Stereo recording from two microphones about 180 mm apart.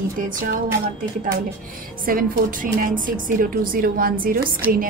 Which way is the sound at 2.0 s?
50° right (ahead or behind).